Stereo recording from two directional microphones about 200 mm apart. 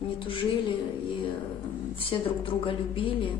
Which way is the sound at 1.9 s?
25° left (ahead or behind).